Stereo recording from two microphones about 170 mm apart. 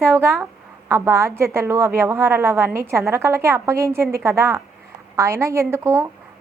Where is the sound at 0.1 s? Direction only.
15° right (ahead or behind).